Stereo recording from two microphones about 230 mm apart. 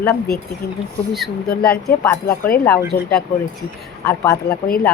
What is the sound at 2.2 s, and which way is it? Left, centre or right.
Speech, left.